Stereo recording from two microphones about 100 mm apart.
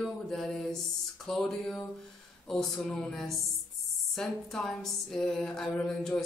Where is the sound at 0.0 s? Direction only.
5° left (ahead or behind).